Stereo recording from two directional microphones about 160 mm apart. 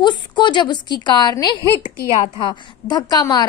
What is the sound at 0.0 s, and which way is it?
A woman's voice, 30° left (ahead or behind).